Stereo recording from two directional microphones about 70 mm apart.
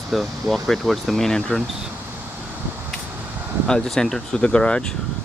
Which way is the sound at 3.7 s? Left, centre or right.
Centre.